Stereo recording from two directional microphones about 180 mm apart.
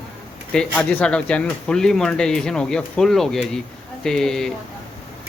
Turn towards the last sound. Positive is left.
turn(degrees=5)  # may be behind; listen again after turning